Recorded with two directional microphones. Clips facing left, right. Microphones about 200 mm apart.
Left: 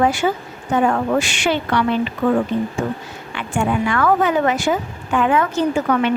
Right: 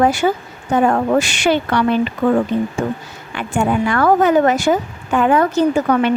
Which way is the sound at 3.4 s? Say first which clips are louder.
Right 3 dB; 40° right (ahead or behind).